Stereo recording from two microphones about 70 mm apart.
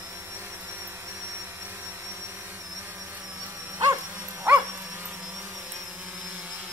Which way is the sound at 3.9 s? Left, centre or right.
Right.